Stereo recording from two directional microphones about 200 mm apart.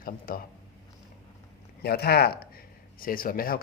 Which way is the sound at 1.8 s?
50° left (ahead or behind).